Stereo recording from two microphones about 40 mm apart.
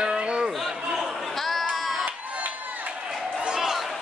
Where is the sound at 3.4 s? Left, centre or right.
Centre.